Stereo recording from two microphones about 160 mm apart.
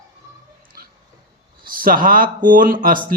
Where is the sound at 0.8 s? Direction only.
70° right (ahead or behind).